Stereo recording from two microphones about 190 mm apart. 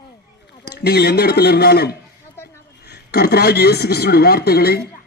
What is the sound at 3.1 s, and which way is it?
Speech, 55° left (ahead or behind).